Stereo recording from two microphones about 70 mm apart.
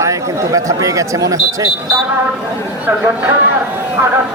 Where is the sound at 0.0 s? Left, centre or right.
Right.